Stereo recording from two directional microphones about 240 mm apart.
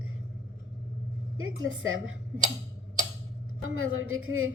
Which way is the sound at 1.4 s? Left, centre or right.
Right.